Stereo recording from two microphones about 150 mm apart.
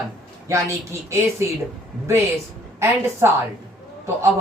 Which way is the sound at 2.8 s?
15° right (ahead or behind).